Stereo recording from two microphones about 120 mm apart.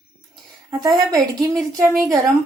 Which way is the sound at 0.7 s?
35° right (ahead or behind).